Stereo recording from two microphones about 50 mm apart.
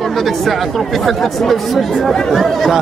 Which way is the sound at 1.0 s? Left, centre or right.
Centre.